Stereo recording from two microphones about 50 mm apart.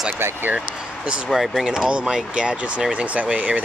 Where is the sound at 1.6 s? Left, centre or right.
Centre.